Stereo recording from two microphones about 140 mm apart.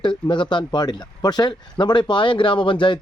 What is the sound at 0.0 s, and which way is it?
Speech, 35° left (ahead or behind).